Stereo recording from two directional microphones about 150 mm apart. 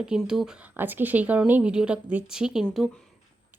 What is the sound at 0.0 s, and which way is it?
Speech, 5° right (ahead or behind).